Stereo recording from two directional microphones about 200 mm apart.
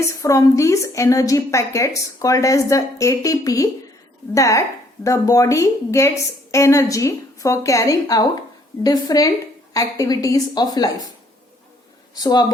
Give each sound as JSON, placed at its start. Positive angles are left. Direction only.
{"t": 0.2, "sound": "a woman's voice", "side_deg": 15}
{"t": 12.1, "sound": "a woman's voice", "side_deg": 20}